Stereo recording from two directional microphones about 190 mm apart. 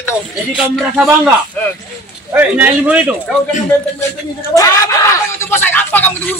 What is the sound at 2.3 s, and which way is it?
Speech, 10° right (ahead or behind).